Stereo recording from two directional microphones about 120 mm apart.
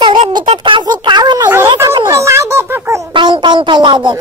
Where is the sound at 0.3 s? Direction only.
45° right (ahead or behind).